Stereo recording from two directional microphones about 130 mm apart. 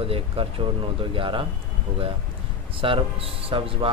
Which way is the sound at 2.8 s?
45° right (ahead or behind).